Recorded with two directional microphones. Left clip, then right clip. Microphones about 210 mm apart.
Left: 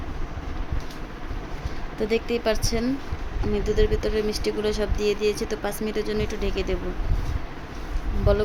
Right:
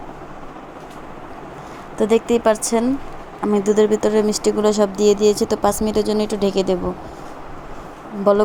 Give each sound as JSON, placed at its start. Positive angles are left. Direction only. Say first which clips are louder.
{"t": 2.0, "sound": "speech", "louder": "right 8 dB", "side_deg": -15}
{"t": 8.3, "sound": "speech", "louder": "right 8 dB", "side_deg": -20}